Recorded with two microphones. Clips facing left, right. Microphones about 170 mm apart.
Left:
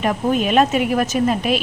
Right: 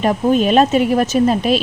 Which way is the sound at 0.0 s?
30° right (ahead or behind).